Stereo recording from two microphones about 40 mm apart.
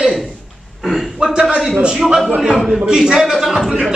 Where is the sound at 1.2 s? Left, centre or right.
Right.